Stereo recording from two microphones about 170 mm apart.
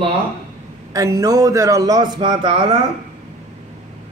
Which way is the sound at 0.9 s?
20° right (ahead or behind).